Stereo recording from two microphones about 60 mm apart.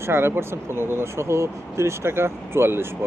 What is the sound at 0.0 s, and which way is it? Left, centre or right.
Speech, right.